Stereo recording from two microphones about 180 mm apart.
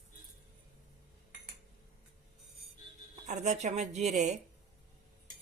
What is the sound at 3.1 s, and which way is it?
Speech, 40° right (ahead or behind).